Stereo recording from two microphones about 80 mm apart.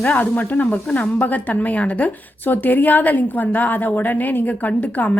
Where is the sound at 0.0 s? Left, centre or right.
Left.